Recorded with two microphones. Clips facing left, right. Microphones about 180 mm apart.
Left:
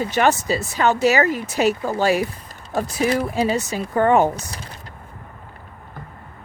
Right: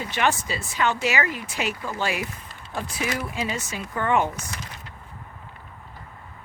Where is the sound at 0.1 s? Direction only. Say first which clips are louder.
Left 4 dB; 40° left (ahead or behind).